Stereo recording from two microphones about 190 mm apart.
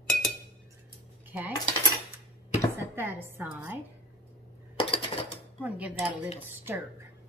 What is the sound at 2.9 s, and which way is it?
Speech, 10° right (ahead or behind).